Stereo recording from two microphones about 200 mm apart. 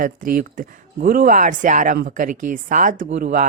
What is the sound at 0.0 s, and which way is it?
Speech, 45° right (ahead or behind).